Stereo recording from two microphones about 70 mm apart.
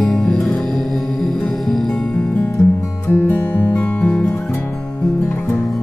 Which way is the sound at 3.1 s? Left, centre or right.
Left.